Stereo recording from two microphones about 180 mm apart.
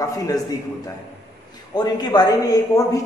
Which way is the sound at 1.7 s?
25° left (ahead or behind).